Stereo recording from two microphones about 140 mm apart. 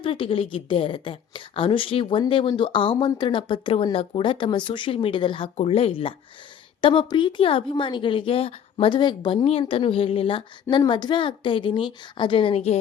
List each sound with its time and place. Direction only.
0.0 s a woman's voice: 40° left (ahead or behind)